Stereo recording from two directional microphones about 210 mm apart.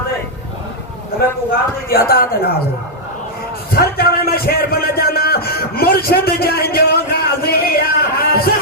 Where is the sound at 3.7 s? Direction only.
45° left (ahead or behind).